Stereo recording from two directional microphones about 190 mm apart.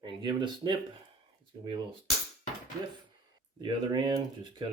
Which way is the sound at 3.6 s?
25° right (ahead or behind).